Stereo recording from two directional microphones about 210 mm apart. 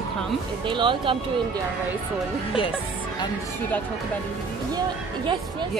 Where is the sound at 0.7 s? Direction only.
25° right (ahead or behind).